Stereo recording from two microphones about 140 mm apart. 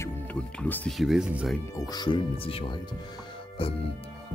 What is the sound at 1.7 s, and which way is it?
Speech, 25° left (ahead or behind).